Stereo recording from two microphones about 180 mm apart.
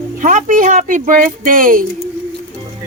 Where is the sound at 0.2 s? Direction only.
45° right (ahead or behind).